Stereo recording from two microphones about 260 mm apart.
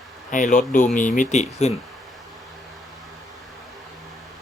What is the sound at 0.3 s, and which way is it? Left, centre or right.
Speech, left.